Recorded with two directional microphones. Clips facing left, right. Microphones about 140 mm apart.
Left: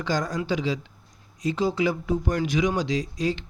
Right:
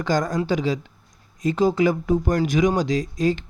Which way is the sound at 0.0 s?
50° right (ahead or behind).